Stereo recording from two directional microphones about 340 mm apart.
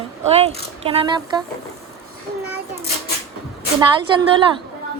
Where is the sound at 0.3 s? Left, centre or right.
Centre.